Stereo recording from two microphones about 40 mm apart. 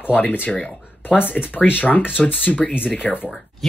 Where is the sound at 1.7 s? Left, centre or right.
Left.